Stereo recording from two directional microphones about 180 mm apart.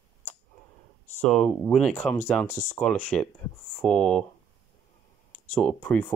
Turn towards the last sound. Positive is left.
turn(degrees=5)  # may be behind; listen again after turning